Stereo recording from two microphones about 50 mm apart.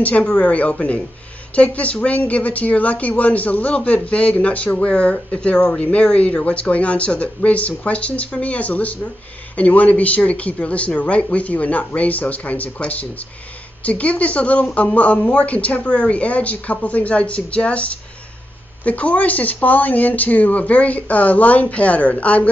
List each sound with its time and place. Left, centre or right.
0.0 s speech: left